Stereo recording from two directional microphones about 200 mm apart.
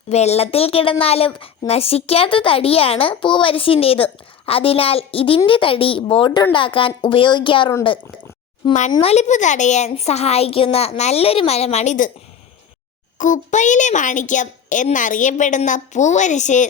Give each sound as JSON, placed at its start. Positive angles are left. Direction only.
{"t": 0.1, "sound": "a woman's voice", "side_deg": 35}
{"t": 8.9, "sound": "a woman's voice", "side_deg": 30}
{"t": 13.1, "sound": "a woman's voice", "side_deg": 40}